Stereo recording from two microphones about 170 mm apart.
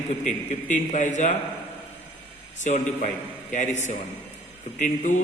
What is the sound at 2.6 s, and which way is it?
A man's voice, 45° left (ahead or behind).